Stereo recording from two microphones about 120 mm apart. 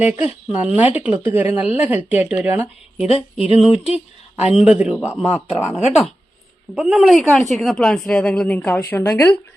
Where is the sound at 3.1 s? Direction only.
55° left (ahead or behind).